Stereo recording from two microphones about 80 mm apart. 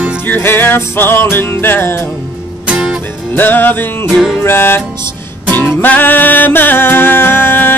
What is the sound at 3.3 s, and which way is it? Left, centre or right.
Music, left.